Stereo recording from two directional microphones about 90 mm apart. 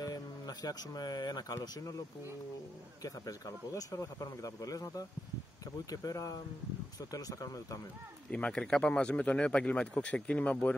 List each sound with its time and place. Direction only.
0.0 s speech: 45° left (ahead or behind)
8.3 s speech: 10° left (ahead or behind)